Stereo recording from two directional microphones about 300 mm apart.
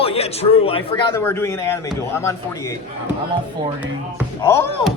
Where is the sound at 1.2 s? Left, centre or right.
Centre.